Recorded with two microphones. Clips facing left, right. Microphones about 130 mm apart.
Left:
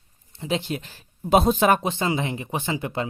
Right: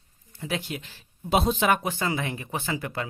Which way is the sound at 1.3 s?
45° left (ahead or behind).